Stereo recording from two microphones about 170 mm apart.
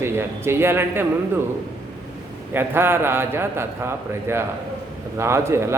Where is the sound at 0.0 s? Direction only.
15° right (ahead or behind).